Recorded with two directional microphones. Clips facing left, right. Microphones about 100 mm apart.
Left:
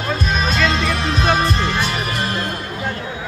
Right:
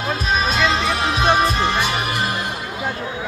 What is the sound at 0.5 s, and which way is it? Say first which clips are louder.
Music: left 1 dB; 5° right (ahead or behind).